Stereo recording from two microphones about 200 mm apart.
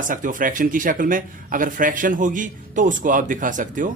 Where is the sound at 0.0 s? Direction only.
40° right (ahead or behind).